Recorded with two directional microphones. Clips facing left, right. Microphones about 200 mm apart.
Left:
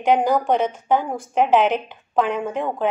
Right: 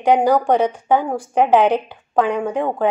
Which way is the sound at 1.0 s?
30° right (ahead or behind).